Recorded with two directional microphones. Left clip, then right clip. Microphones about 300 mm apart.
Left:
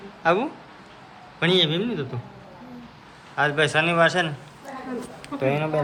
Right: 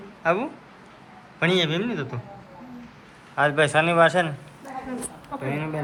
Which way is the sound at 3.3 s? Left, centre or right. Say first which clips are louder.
Right 1 dB; centre.